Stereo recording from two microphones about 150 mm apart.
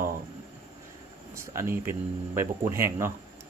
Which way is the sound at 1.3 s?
20° right (ahead or behind).